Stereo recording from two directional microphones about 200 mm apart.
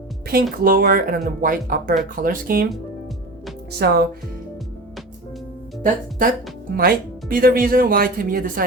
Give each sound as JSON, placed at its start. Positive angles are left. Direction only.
{"t": 0.6, "sound": "speech", "side_deg": -45}
{"t": 3.8, "sound": "speech", "side_deg": -55}
{"t": 5.8, "sound": "speech", "side_deg": -40}